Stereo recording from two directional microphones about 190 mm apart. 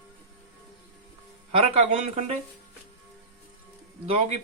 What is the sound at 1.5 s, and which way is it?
Speech, 30° right (ahead or behind).